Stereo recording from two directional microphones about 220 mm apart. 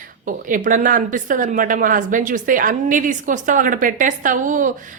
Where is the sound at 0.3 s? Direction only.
35° right (ahead or behind).